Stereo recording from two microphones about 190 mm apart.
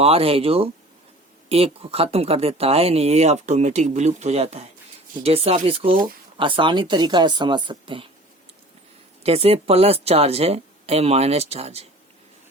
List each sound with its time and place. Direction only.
0.0 s speech: 30° right (ahead or behind)
9.2 s speech: 30° right (ahead or behind)